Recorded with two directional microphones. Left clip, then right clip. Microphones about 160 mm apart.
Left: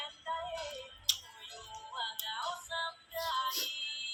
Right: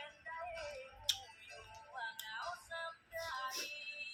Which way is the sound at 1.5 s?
30° left (ahead or behind).